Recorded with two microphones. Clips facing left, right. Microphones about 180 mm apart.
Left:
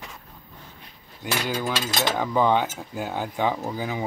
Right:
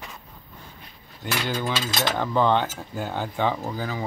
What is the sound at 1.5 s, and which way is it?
Speech, 5° left (ahead or behind).